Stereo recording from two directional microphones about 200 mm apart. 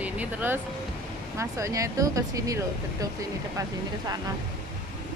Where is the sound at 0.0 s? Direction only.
10° right (ahead or behind).